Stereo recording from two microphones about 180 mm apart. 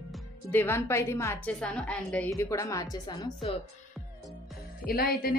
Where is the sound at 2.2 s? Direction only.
15° left (ahead or behind).